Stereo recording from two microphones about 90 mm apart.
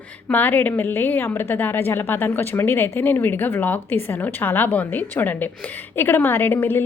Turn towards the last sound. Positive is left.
turn(degrees=25)  # may be behind; listen again after turning